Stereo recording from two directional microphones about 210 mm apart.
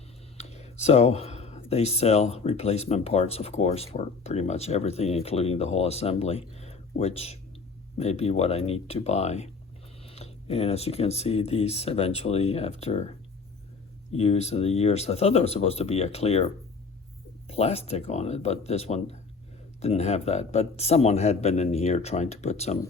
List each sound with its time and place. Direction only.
0.3 s speech: 30° left (ahead or behind)
6.6 s a sound: 30° left (ahead or behind)
7.9 s speech: 30° left (ahead or behind)
14.1 s speech: 30° left (ahead or behind)
17.5 s speech: 30° left (ahead or behind)